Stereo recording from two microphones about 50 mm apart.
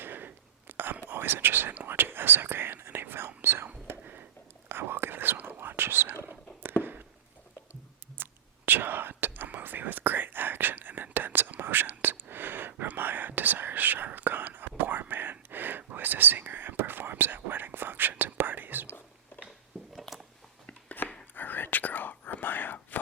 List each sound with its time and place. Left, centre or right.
0.0 s a sound: right
1.0 s speech: right
1.9 s whispering: right
4.0 s a sound: right
4.7 s whispering: right
8.2 s whispering: right
19.3 s a sound: left
20.0 s biting: centre
21.0 s whispering: left